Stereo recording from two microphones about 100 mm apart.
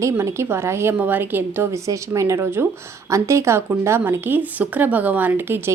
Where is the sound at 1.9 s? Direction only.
30° right (ahead or behind).